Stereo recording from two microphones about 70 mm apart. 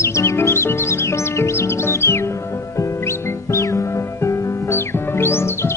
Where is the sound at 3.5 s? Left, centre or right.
Left.